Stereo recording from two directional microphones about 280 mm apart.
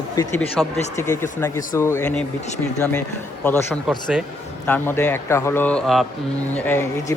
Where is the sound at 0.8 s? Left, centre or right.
Left.